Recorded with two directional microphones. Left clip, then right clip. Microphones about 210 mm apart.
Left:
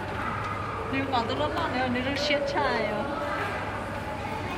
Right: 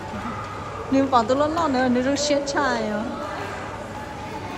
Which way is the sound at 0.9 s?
25° right (ahead or behind).